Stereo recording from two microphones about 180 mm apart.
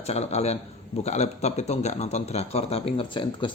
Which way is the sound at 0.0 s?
35° left (ahead or behind).